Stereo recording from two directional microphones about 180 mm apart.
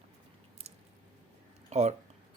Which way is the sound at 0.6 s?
35° right (ahead or behind).